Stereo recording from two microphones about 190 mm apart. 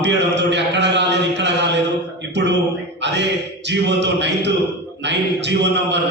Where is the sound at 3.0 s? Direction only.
65° right (ahead or behind).